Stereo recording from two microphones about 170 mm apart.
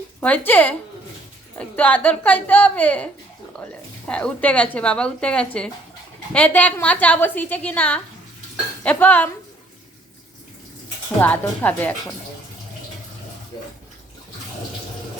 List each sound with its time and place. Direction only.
0.2 s a woman's voice: 10° left (ahead or behind)
11.2 s a woman's voice: 10° left (ahead or behind)
13.5 s bathtub: 20° left (ahead or behind)